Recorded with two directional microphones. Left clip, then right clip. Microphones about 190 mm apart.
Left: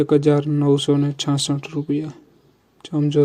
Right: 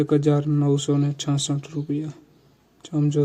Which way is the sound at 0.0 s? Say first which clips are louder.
Left 4 dB; 25° left (ahead or behind).